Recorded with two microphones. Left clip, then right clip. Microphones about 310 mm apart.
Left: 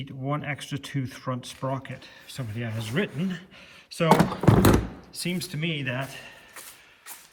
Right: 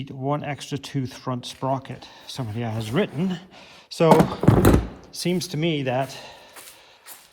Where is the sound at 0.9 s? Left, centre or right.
Centre.